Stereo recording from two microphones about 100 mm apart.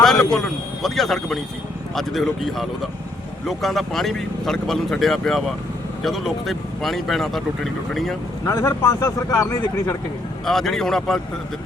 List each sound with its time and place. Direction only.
0.0 s speech: 5° left (ahead or behind)
8.4 s speech: 25° left (ahead or behind)
10.4 s speech: 5° left (ahead or behind)